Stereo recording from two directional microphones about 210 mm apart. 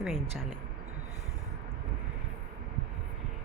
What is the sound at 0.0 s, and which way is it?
Speech, centre (ahead or behind).